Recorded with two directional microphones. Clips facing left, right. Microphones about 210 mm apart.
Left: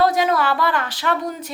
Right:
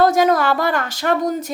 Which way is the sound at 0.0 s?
45° right (ahead or behind).